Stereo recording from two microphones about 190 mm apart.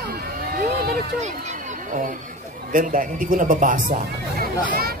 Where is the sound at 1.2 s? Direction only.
40° right (ahead or behind).